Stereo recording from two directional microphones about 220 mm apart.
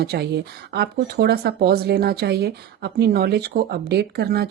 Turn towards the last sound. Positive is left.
turn(degrees=-45)  # may be behind; listen again after turning